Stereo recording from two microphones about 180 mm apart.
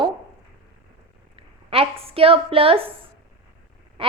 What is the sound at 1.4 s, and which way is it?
A woman's voice, 30° right (ahead or behind).